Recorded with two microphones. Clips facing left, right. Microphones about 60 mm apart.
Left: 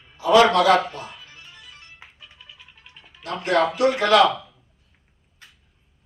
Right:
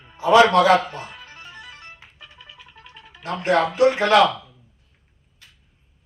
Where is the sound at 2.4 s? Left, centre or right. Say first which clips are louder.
Right 3 dB; right.